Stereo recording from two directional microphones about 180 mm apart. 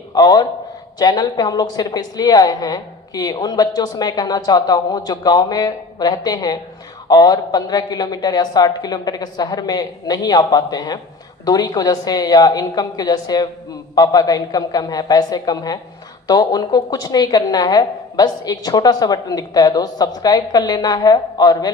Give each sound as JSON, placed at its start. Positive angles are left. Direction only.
{"t": 0.1, "sound": "a man's voice", "side_deg": 20}